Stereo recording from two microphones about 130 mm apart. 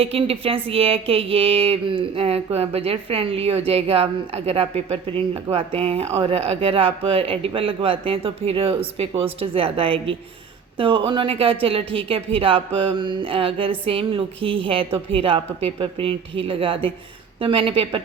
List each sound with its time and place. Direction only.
0.0 s speech: 50° right (ahead or behind)